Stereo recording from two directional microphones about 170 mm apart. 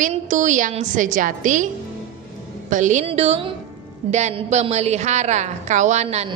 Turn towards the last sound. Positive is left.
turn(degrees=-40)  # may be behind; listen again after turning